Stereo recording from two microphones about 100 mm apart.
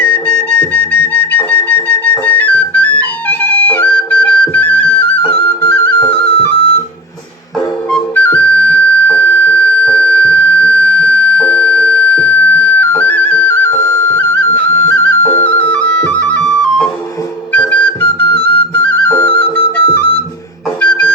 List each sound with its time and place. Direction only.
0.0 s music: 20° left (ahead or behind)
5.6 s flute: 20° left (ahead or behind)
8.1 s music: 20° left (ahead or behind)
18.7 s flute: 15° left (ahead or behind)
19.7 s music: 20° left (ahead or behind)